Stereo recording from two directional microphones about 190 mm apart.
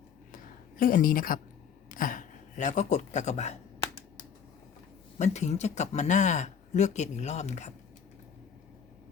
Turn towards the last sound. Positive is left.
turn(degrees=35)  # may be behind; listen again after turning